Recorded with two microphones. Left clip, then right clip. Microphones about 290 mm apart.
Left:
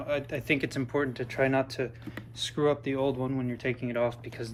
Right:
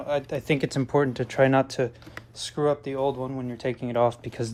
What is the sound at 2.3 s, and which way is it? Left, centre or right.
Speech, centre.